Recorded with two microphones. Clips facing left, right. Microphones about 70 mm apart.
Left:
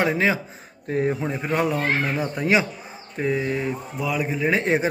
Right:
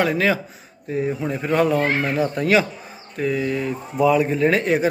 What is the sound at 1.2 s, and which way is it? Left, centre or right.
Speech, centre.